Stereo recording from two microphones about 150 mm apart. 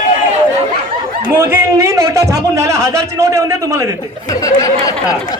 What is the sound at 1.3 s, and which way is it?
Speech, 15° right (ahead or behind).